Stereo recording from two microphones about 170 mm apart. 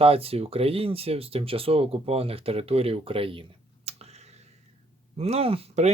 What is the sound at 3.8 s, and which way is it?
Tick-tock, 40° right (ahead or behind).